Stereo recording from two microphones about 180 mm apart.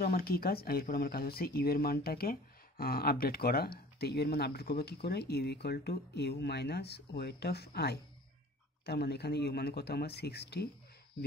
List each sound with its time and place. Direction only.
0.0 s speech: 60° left (ahead or behind)